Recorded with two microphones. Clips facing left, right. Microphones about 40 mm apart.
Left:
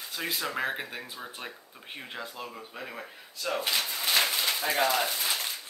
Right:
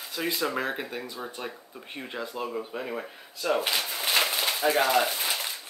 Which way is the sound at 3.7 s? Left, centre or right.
Centre.